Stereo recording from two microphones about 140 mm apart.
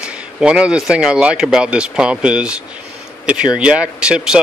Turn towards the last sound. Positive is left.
turn(degrees=-5)  # may be behind; listen again after turning